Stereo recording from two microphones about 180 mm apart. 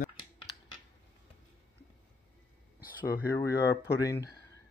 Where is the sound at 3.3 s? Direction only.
15° left (ahead or behind).